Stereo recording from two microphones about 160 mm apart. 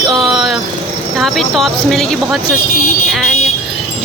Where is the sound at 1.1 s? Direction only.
Centre (ahead or behind).